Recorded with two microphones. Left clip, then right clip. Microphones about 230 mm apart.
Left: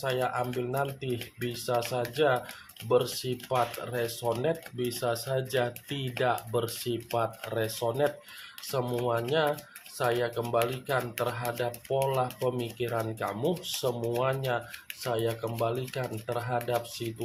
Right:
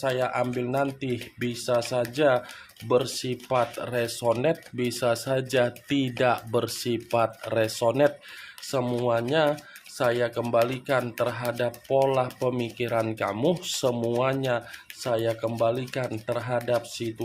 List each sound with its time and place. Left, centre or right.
0.0 s speech: right